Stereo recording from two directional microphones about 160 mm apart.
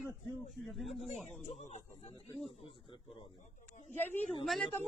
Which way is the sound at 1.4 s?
45° left (ahead or behind).